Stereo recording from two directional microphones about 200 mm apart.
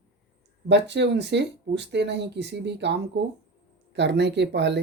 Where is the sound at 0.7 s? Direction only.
60° right (ahead or behind).